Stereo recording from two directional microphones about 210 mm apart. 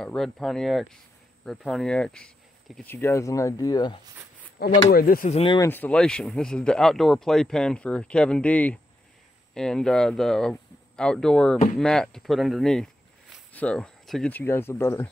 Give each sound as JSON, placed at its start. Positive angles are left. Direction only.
{"t": 0.0, "sound": "speech", "side_deg": 0}
{"t": 4.6, "sound": "speech", "side_deg": 50}
{"t": 5.4, "sound": "speech", "side_deg": 25}
{"t": 5.7, "sound": "speech", "side_deg": 5}